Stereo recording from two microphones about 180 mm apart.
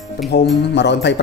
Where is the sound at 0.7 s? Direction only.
75° left (ahead or behind).